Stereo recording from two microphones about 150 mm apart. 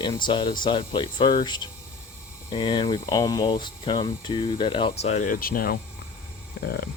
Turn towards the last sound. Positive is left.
turn(degrees=90)